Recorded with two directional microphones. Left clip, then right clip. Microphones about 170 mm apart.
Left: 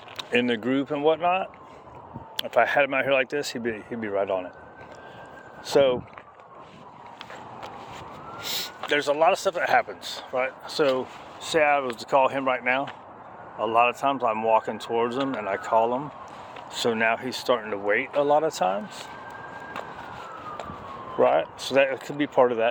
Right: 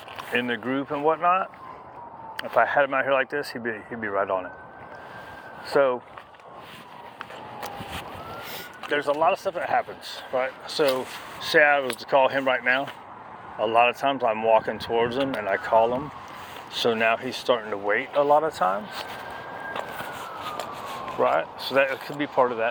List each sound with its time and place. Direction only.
0.3 s speech: 65° left (ahead or behind); by 4.4 s 45° left (ahead or behind)
5.7 s speech: 45° left (ahead or behind)
8.4 s a sound: 60° left (ahead or behind)
8.9 s speech: 50° left (ahead or behind)
10.1 s speech: 25° left (ahead or behind)
13.6 s speech: 10° left (ahead or behind); by 17.7 s 30° left (ahead or behind)
17.8 s speech: 40° left (ahead or behind)
21.2 s speech: 55° left (ahead or behind)